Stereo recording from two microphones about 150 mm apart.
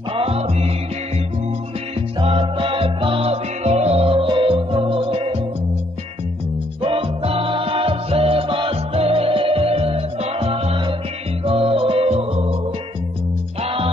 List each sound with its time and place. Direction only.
0.1 s music: 40° right (ahead or behind)
2.0 s music: 40° right (ahead or behind)
6.8 s music: 35° right (ahead or behind)
13.6 s music: 40° right (ahead or behind)